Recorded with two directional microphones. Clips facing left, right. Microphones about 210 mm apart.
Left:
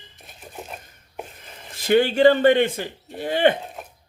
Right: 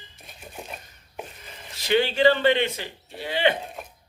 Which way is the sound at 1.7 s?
50° left (ahead or behind).